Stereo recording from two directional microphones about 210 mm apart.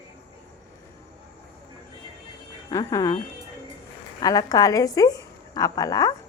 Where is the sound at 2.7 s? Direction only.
15° left (ahead or behind).